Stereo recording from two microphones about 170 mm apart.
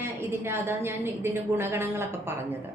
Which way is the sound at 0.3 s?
15° right (ahead or behind).